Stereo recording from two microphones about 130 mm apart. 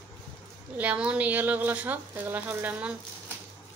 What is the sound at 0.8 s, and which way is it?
Speech, 10° right (ahead or behind).